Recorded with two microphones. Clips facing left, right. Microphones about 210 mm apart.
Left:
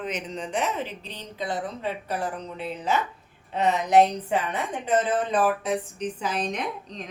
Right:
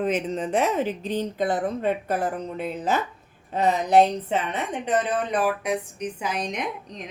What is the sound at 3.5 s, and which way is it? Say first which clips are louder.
Speech: right 1 dB; 35° right (ahead or behind).